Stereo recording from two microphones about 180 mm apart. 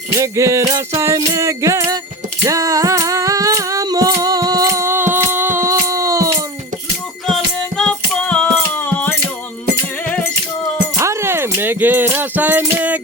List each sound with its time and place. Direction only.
0.2 s music: 15° right (ahead or behind)
7.8 s music: 5° left (ahead or behind)
10.9 s keys jangling: 15° right (ahead or behind)